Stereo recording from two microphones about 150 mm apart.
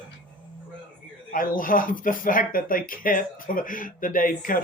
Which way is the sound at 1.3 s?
70° left (ahead or behind).